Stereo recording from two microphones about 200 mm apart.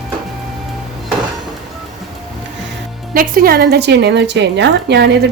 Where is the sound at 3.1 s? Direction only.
45° right (ahead or behind).